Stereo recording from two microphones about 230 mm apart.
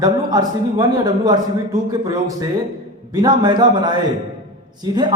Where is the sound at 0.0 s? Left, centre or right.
Centre.